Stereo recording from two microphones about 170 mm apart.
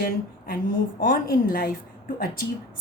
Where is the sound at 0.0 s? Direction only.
60° left (ahead or behind).